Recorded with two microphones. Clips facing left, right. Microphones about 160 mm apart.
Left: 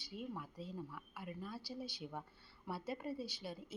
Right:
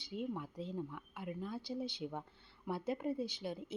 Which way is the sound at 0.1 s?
20° right (ahead or behind).